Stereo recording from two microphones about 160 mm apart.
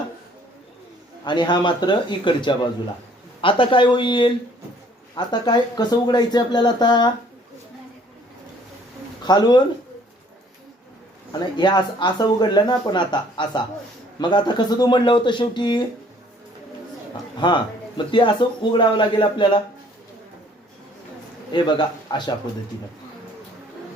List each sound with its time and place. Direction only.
1.2 s speech: 30° left (ahead or behind)
9.2 s speech: 25° left (ahead or behind)
11.3 s speech: 30° left (ahead or behind)
17.4 s speech: 30° left (ahead or behind)
21.5 s speech: 30° left (ahead or behind)